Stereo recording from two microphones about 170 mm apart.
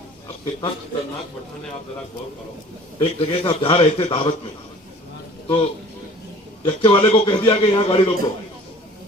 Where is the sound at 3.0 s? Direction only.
35° left (ahead or behind).